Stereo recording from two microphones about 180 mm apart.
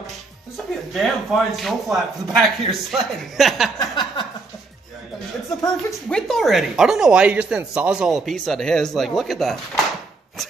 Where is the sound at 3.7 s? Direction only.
25° left (ahead or behind).